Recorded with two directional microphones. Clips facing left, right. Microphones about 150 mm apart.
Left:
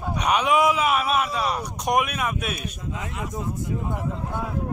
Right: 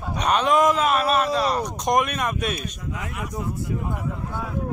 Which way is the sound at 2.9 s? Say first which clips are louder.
Left 1 dB; 25° left (ahead or behind).